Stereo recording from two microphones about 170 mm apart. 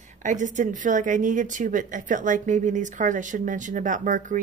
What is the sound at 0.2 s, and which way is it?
A woman's voice, 45° right (ahead or behind).